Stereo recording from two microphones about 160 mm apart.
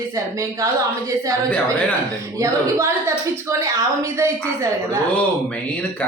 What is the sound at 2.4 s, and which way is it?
A woman's voice, 15° right (ahead or behind).